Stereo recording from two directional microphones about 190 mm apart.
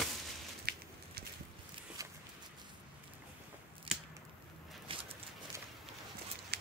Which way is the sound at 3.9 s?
25° right (ahead or behind).